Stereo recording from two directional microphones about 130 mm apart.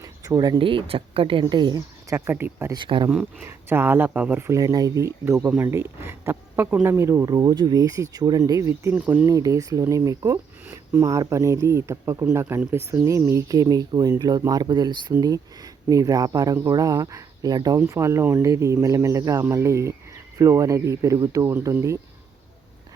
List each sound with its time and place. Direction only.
0.0 s speech: 30° right (ahead or behind)
2.7 s speech: 35° right (ahead or behind)
3.4 s speech: 15° right (ahead or behind)
9.3 s speech: 25° right (ahead or behind)